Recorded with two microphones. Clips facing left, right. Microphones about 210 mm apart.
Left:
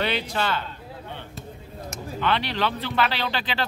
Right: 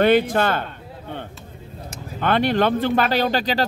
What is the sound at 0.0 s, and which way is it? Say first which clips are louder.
Speech: right 10 dB; 50° right (ahead or behind).